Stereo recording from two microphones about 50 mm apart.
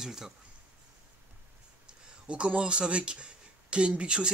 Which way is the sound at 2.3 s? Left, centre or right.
Right.